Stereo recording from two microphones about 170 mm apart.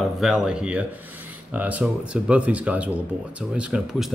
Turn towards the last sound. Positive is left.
turn(degrees=-5)  # may be behind; listen again after turning